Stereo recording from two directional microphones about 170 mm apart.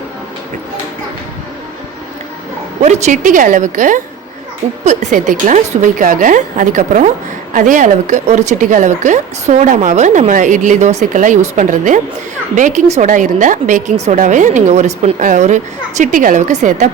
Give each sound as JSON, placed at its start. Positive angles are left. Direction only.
{"t": 2.8, "sound": "speech", "side_deg": -45}